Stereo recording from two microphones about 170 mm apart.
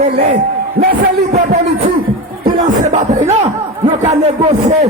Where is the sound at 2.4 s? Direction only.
50° right (ahead or behind).